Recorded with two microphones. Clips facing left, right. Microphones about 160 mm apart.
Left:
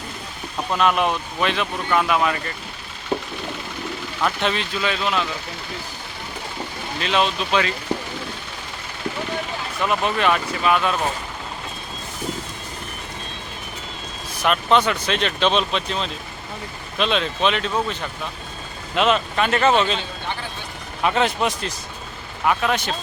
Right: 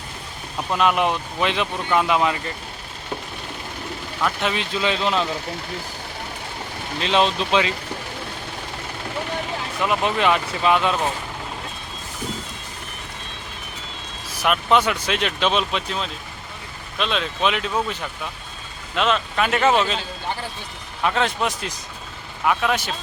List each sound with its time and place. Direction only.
0.7 s speech: 15° right (ahead or behind)
4.2 s speech: 5° right (ahead or behind)
4.6 s speech: 25° right (ahead or behind)
7.0 s speech: 30° right (ahead or behind)
9.8 s speech: 15° right (ahead or behind)
14.4 s speech: 5° right (ahead or behind)
18.9 s speech: 5° left (ahead or behind)
19.4 s speech: 5° right (ahead or behind)